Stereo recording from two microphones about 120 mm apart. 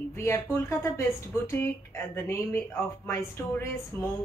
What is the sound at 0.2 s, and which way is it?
A woman's voice, 20° left (ahead or behind).